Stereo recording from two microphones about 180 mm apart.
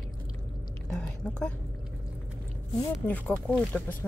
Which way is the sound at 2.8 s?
5° left (ahead or behind).